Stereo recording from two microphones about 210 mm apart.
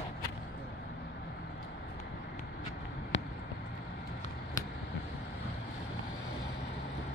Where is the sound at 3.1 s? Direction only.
60° left (ahead or behind).